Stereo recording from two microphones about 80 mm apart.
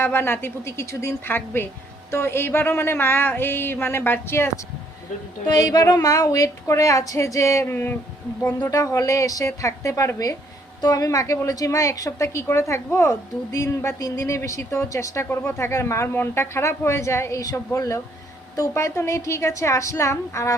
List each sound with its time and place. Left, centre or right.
0.0 s a woman's voice: left
5.5 s speech: left
5.9 s a sound: left
8.7 s a woman's voice: left
10.8 s a sound: left
11.4 s a woman's voice: left